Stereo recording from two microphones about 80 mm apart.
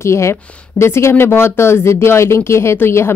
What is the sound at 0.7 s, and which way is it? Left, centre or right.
Speech, left.